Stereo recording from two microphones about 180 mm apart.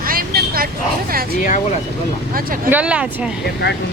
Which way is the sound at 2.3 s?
50° right (ahead or behind).